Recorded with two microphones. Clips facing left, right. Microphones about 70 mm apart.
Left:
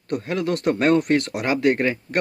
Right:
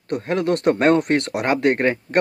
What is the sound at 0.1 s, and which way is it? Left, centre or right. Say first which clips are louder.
Speech: right 3 dB; right.